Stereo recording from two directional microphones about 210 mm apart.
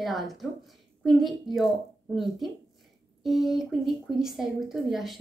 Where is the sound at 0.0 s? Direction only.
Centre (ahead or behind).